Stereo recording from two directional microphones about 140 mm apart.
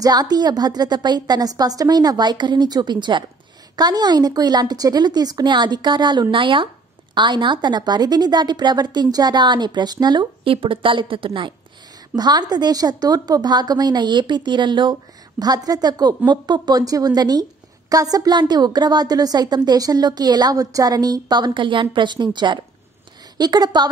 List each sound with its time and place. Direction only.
0.0 s a woman's voice: 30° right (ahead or behind)